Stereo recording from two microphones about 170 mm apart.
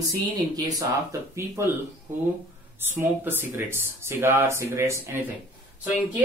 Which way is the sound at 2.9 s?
10° right (ahead or behind).